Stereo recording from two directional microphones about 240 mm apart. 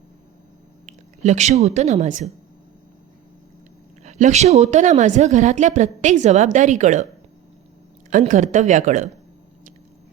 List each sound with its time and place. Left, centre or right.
0.9 s speech: right
4.0 s a woman's voice: right
8.1 s a woman's voice: right